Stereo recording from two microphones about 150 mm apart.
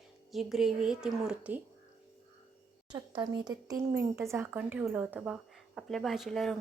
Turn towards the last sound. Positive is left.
turn(degrees=0)  # may be behind; listen again after turning